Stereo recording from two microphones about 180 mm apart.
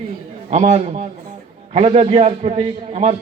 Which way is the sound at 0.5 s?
40° right (ahead or behind).